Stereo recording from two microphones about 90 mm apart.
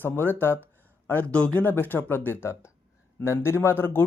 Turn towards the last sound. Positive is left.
turn(degrees=25)  # may be behind; listen again after turning